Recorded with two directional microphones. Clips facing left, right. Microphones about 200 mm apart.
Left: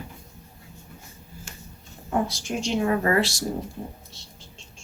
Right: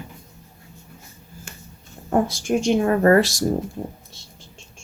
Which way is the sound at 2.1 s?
50° right (ahead or behind).